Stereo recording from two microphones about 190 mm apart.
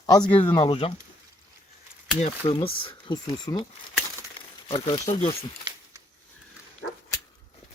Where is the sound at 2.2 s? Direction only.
30° left (ahead or behind).